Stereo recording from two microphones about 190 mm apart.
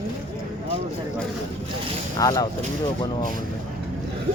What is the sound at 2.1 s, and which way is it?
Speech, 20° left (ahead or behind).